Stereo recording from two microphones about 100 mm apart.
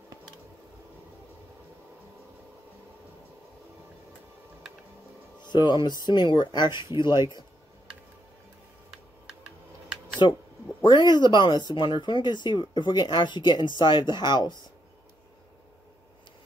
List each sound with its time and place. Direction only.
5.4 s speech: 45° left (ahead or behind)
10.2 s speech: 50° left (ahead or behind)